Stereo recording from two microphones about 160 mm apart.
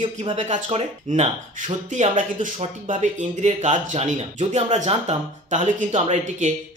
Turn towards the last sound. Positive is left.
turn(degrees=-45)  # may be behind; listen again after turning